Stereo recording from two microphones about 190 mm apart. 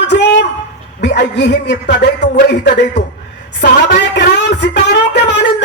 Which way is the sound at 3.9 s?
60° left (ahead or behind).